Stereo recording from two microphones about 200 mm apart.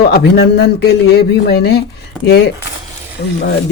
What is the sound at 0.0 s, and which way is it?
Speech, 55° left (ahead or behind).